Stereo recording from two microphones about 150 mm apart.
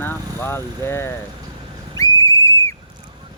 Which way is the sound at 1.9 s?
20° left (ahead or behind).